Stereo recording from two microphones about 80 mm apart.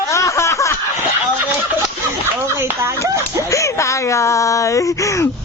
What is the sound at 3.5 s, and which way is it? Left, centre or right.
Speech, left.